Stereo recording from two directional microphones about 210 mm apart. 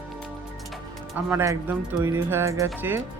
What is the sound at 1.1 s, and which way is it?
Speech, 10° right (ahead or behind).